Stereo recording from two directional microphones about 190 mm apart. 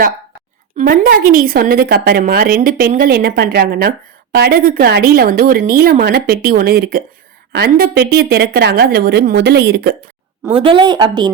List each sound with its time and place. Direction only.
0.8 s a woman's voice: 45° right (ahead or behind)
10.5 s speech: 25° right (ahead or behind)